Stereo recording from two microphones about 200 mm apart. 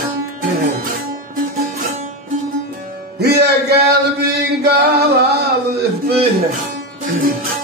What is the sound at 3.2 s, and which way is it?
Music, 55° right (ahead or behind).